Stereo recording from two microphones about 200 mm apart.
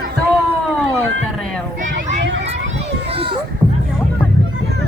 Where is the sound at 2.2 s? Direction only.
65° right (ahead or behind).